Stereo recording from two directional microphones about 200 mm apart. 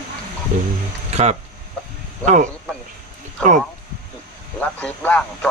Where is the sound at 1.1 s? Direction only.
35° right (ahead or behind).